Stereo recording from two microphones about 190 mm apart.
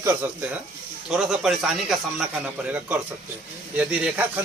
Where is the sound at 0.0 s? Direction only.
10° right (ahead or behind).